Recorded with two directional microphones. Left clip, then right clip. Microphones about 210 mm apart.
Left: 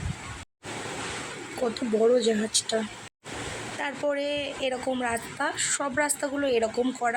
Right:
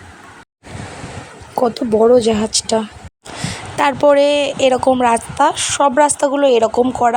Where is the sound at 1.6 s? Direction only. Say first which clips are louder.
Right 11 dB; 30° right (ahead or behind).